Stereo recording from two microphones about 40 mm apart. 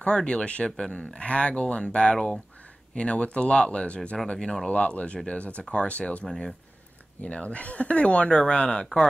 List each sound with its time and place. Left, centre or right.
0.0 s speech: left
0.9 s speech: left
2.1 s speech: centre
3.0 s speech: left
4.3 s speech: centre
4.6 s speech: left
6.2 s speech: centre
7.2 s speech: left
8.4 s speech: left